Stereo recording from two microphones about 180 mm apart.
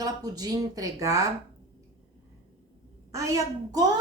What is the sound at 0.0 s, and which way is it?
A woman's voice, 20° right (ahead or behind).